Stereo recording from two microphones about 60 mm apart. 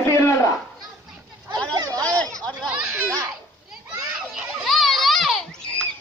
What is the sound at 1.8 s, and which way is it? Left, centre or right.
Chatter, right.